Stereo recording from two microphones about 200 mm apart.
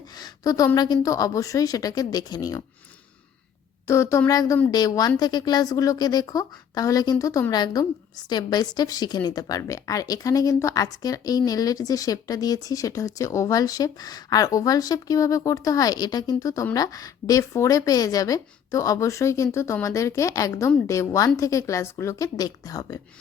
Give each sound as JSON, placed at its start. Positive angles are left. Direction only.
{"t": 0.2, "sound": "a woman's voice", "side_deg": 15}
{"t": 3.8, "sound": "a woman's voice", "side_deg": 15}